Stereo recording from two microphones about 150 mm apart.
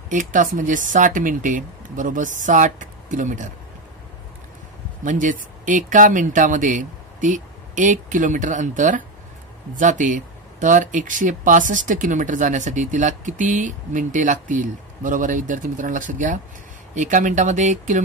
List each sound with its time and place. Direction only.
0.1 s speech: 60° right (ahead or behind)
5.0 s speech: 60° right (ahead or behind)